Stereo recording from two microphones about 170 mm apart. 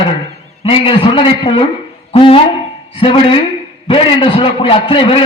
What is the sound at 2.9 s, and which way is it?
A woman's voice, 30° left (ahead or behind).